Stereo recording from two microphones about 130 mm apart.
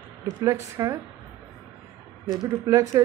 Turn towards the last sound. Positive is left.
turn(degrees=-25)  # may be behind; listen again after turning